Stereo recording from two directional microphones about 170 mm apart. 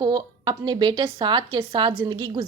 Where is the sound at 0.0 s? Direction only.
25° right (ahead or behind).